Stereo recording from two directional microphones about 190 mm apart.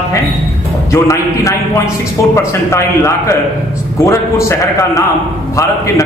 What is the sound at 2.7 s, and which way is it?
Speech, 15° left (ahead or behind).